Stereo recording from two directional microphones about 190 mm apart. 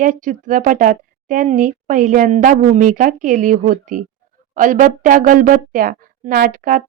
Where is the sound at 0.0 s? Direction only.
45° right (ahead or behind).